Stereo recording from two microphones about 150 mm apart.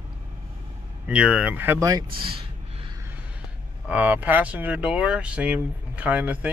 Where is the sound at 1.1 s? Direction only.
5° right (ahead or behind).